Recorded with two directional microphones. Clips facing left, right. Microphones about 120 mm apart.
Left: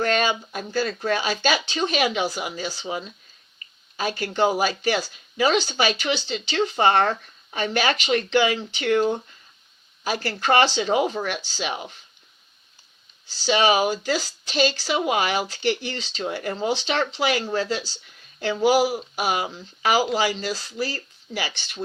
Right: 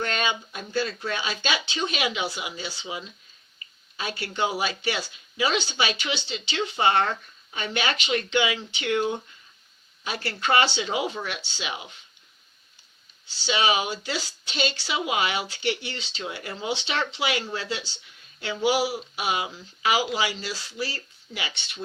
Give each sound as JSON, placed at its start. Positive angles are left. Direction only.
{"t": 0.0, "sound": "speech", "side_deg": 40}
{"t": 13.4, "sound": "speech", "side_deg": 40}